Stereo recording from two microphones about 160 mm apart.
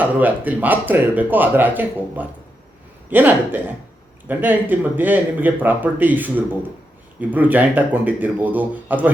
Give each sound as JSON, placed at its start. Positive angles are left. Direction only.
{"t": 0.0, "sound": "speech", "side_deg": -10}